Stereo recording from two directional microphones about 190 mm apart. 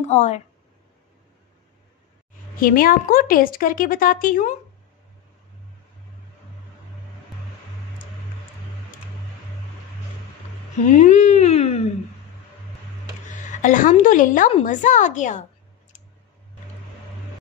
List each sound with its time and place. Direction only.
0.0 s a woman's voice: 35° left (ahead or behind)
2.5 s a woman's voice: 45° left (ahead or behind)
10.8 s a woman's voice: 40° left (ahead or behind)
13.3 s a woman's voice: 40° left (ahead or behind)